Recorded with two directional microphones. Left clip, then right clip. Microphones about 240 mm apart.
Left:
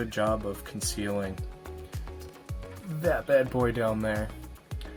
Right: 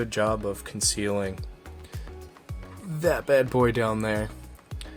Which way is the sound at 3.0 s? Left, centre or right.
Right.